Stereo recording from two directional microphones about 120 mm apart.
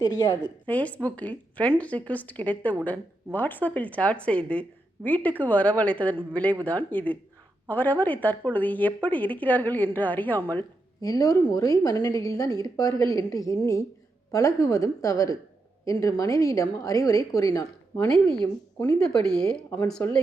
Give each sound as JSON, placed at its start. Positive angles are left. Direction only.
{"t": 0.0, "sound": "a woman's voice", "side_deg": 35}
{"t": 0.6, "sound": "a woman's voice", "side_deg": 10}
{"t": 11.0, "sound": "a woman's voice", "side_deg": 30}
{"t": 18.9, "sound": "speech", "side_deg": 5}
{"t": 20.0, "sound": "a woman's voice", "side_deg": 25}